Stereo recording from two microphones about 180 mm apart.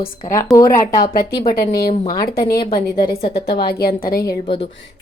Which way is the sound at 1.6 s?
60° left (ahead or behind).